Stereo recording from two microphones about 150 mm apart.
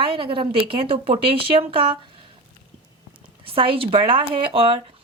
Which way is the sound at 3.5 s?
35° right (ahead or behind).